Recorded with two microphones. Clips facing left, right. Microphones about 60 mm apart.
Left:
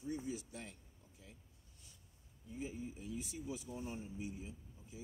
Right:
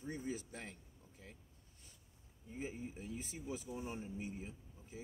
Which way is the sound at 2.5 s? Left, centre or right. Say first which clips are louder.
Even; right.